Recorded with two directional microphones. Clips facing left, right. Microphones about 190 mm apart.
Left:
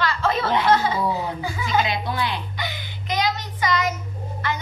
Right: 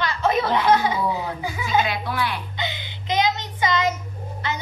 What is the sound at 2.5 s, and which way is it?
Child singing, 20° right (ahead or behind).